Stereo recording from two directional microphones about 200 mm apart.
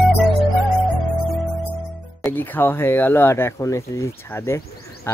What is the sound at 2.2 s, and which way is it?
Speech, 10° left (ahead or behind).